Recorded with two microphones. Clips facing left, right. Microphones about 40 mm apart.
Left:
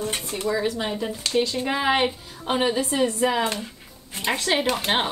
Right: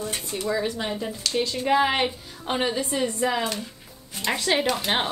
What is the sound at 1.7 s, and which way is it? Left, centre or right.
A woman's voice, centre.